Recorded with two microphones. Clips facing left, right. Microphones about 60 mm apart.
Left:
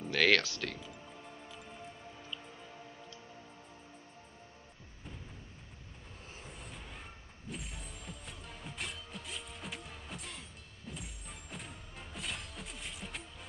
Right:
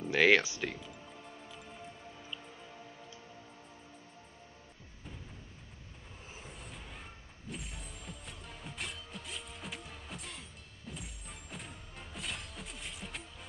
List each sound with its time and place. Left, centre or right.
0.1 s speech: centre
0.7 s music: centre
6.4 s vehicle: centre
7.4 s music: centre